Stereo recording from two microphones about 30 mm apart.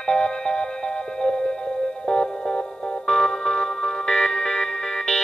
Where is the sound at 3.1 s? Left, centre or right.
Left.